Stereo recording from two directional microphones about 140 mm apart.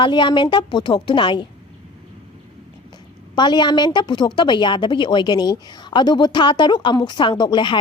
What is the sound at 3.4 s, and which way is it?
Speech, 30° left (ahead or behind).